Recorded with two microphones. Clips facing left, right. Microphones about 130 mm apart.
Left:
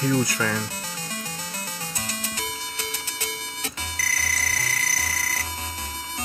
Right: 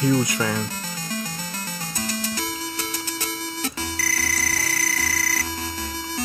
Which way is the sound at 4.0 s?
35° right (ahead or behind).